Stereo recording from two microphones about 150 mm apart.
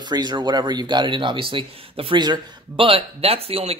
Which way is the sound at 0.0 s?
30° right (ahead or behind).